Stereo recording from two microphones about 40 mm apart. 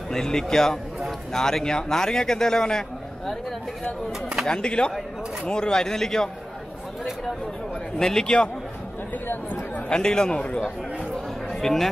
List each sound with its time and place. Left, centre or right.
0.1 s a man's voice: centre
4.5 s a man's voice: left
8.0 s a man's voice: centre
9.5 s chatter: left
9.9 s a man's voice: left
11.6 s speech: centre